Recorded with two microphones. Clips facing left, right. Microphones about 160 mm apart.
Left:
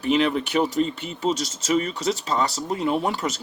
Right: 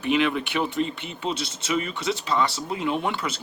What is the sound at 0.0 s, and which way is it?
Speech, 40° left (ahead or behind).